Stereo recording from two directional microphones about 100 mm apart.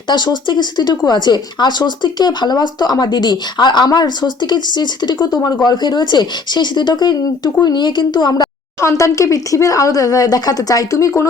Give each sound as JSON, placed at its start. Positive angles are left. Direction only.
{"t": 0.1, "sound": "speech", "side_deg": 45}
{"t": 8.8, "sound": "speech", "side_deg": 30}